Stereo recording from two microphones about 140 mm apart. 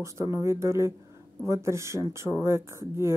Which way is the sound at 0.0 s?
20° right (ahead or behind).